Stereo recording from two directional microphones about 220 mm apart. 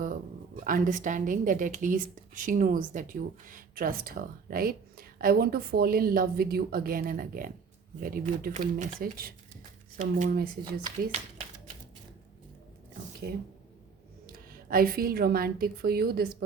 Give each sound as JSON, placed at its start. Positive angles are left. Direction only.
{"t": 0.0, "sound": "a woman's voice", "side_deg": -40}
{"t": 14.3, "sound": "a woman's voice", "side_deg": -40}